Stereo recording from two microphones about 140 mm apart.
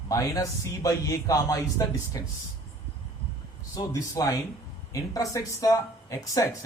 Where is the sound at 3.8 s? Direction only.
30° left (ahead or behind).